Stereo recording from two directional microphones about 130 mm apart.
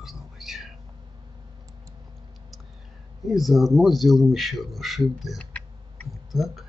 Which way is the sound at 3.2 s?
Centre (ahead or behind).